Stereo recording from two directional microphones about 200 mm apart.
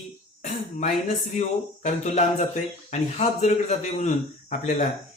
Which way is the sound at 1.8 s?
35° left (ahead or behind).